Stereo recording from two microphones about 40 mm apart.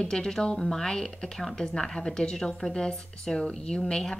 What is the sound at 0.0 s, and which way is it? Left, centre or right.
A woman's voice, centre.